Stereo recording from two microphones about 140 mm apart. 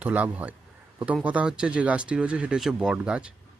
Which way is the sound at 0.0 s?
10° right (ahead or behind).